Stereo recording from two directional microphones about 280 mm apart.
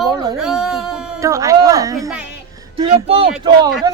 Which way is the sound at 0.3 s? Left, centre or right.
Centre.